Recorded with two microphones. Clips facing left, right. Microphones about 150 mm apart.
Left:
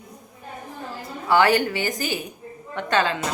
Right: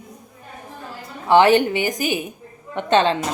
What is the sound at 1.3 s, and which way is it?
A woman's voice, 20° right (ahead or behind).